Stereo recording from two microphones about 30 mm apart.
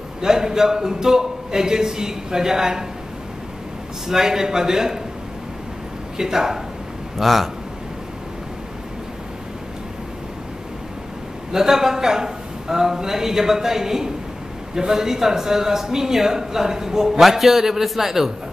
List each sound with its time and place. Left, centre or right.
0.2 s a man's voice: centre
4.1 s a man's voice: centre
6.1 s a man's voice: centre
7.2 s a man's voice: centre
11.5 s a man's voice: centre
17.2 s a man's voice: centre